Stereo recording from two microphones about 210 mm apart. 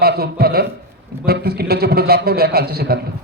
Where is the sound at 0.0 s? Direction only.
50° right (ahead or behind).